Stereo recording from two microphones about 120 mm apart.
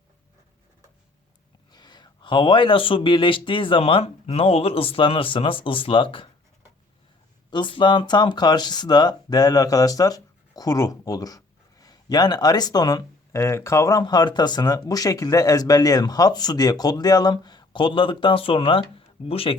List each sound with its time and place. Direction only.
1.7 s speech: 35° left (ahead or behind)
7.5 s speech: 40° left (ahead or behind)